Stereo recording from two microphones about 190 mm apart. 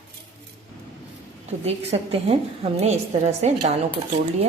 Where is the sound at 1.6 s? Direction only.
35° right (ahead or behind).